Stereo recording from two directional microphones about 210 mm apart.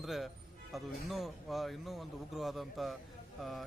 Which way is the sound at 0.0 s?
Centre (ahead or behind).